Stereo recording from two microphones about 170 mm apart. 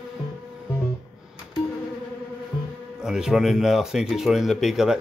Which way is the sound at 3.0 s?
5° right (ahead or behind).